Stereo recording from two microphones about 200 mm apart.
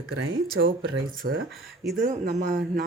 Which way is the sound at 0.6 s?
60° right (ahead or behind).